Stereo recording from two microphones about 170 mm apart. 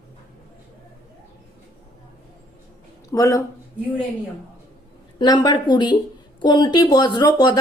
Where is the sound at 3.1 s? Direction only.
20° left (ahead or behind).